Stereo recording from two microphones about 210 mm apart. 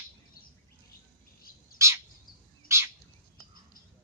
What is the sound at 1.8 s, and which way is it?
Bird, 15° right (ahead or behind).